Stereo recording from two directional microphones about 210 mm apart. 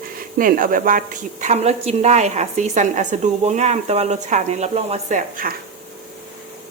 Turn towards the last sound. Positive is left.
turn(degrees=-40)  # may be behind; listen again after turning